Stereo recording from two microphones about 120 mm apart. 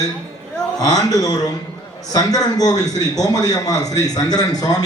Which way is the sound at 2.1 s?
30° left (ahead or behind).